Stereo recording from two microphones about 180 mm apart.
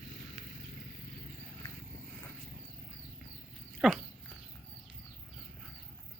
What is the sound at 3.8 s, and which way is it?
Dog, centre (ahead or behind).